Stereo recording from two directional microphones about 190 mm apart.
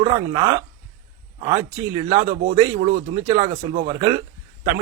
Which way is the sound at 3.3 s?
20° right (ahead or behind).